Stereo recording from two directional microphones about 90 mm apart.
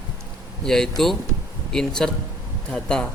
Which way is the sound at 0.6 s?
5° left (ahead or behind).